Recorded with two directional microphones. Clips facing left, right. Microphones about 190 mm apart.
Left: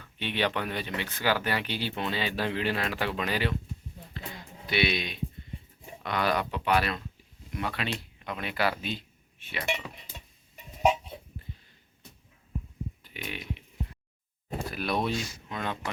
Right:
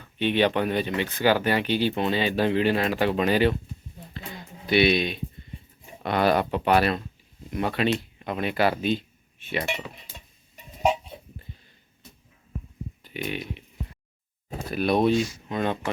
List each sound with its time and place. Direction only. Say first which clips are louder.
0.2 s speech: right 8 dB; 20° right (ahead or behind)
4.6 s speech: right 8 dB; 25° right (ahead or behind)
9.5 s speech: right 4 dB; 35° right (ahead or behind)
13.1 s speech: right 9 dB; 25° right (ahead or behind)
14.7 s speech: right 9 dB; 25° right (ahead or behind)